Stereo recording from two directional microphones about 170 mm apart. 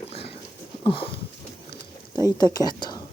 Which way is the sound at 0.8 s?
30° left (ahead or behind).